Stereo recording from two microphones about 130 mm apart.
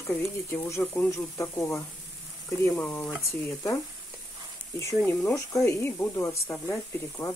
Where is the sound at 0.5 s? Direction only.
25° left (ahead or behind).